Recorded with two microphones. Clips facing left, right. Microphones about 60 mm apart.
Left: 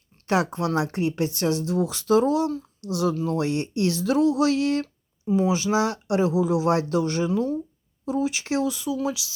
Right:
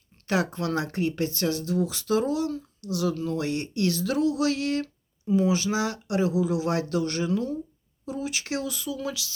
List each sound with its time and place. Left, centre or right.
0.3 s speech: left